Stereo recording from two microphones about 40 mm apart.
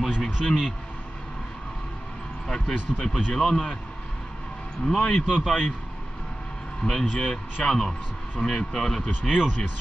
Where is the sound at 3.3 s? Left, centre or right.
Centre.